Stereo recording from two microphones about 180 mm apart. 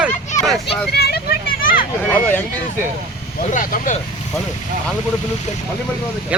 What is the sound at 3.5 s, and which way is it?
Speech, 45° left (ahead or behind).